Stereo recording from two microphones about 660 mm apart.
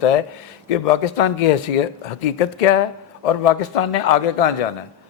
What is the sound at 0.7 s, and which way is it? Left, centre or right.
Speech, left.